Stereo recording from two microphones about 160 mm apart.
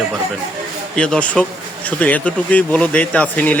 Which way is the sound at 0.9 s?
5° left (ahead or behind).